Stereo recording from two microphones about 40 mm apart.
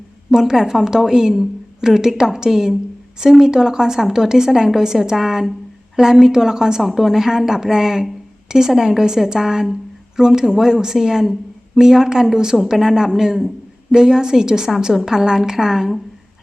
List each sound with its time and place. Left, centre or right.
0.3 s a woman's voice: centre